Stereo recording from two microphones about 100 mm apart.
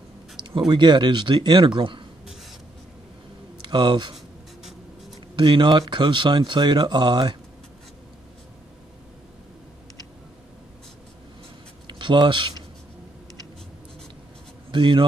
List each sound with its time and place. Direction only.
0.6 s a man's voice: 50° right (ahead or behind)
3.6 s speech: 50° right (ahead or behind)
5.3 s speech: 50° right (ahead or behind)
11.9 s speech: 50° right (ahead or behind)
14.7 s speech: 55° right (ahead or behind)